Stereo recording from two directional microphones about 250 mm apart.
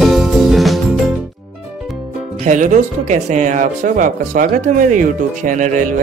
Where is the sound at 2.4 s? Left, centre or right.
Right.